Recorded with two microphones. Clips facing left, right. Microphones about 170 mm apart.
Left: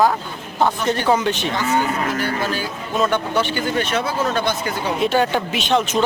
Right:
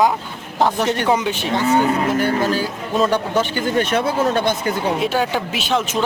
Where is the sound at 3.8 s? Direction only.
55° right (ahead or behind).